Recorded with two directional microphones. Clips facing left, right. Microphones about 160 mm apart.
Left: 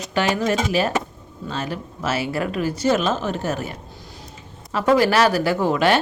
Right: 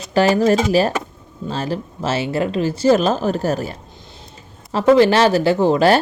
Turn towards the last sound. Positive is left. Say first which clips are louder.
# right 5 dB
turn(degrees=-30)  # may be behind; listen again after turning